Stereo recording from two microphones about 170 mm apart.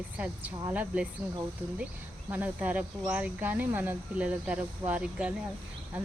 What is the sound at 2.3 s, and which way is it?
Speech, 10° right (ahead or behind).